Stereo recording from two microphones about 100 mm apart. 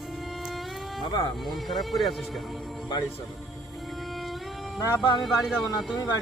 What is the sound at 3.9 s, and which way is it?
Music, centre (ahead or behind).